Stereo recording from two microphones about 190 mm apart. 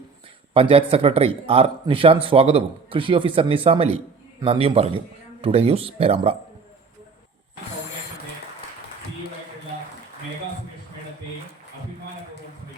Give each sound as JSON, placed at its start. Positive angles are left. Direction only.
{"t": 0.5, "sound": "speech", "side_deg": -30}